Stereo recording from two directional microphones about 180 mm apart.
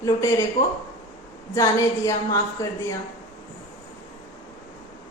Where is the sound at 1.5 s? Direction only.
15° left (ahead or behind).